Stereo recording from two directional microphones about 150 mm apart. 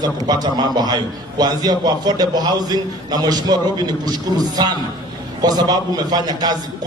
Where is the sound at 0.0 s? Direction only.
25° right (ahead or behind).